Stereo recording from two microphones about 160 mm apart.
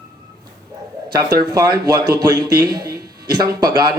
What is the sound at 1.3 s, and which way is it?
Speech, 25° right (ahead or behind).